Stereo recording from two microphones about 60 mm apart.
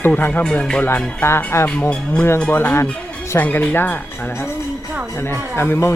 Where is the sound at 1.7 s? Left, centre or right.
Centre.